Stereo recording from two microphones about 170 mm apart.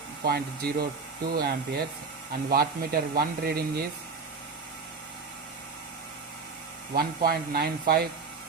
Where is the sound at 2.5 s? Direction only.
65° right (ahead or behind).